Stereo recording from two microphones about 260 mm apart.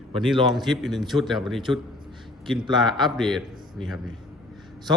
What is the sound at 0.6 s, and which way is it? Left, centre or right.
A man's voice, centre.